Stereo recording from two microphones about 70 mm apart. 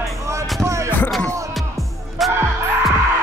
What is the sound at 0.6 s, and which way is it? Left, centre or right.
Music, right.